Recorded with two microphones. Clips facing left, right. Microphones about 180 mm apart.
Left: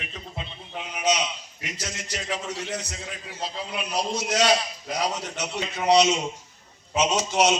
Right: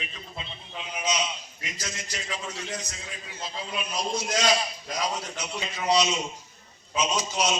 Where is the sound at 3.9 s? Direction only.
70° left (ahead or behind).